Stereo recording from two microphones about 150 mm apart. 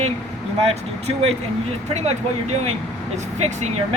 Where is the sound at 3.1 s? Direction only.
50° right (ahead or behind).